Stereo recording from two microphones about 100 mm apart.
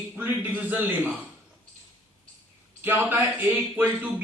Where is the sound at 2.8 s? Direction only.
20° right (ahead or behind).